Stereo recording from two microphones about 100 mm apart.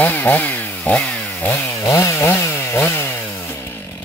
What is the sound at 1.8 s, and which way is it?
Chainsaw, 30° left (ahead or behind).